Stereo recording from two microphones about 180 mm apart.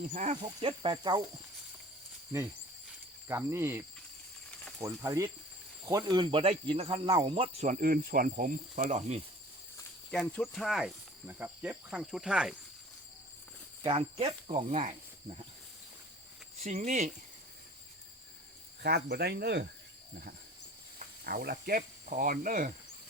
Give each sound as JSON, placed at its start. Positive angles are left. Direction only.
{"t": 0.0, "sound": "speech", "side_deg": -40}
{"t": 0.4, "sound": "speech", "side_deg": -30}
{"t": 3.2, "sound": "cricket", "side_deg": -15}
{"t": 5.8, "sound": "speech", "side_deg": -20}
{"t": 8.7, "sound": "speech", "side_deg": -40}
{"t": 10.1, "sound": "speech", "side_deg": 10}
{"t": 13.8, "sound": "speech", "side_deg": -30}
{"t": 16.6, "sound": "speech", "side_deg": -40}
{"t": 18.8, "sound": "speech", "side_deg": -65}
{"t": 21.0, "sound": "speech", "side_deg": -55}